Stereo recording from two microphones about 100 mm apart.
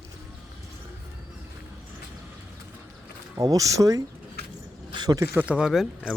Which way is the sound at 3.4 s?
35° right (ahead or behind).